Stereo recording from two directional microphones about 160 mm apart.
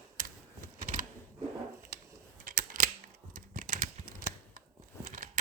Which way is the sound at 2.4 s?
65° right (ahead or behind).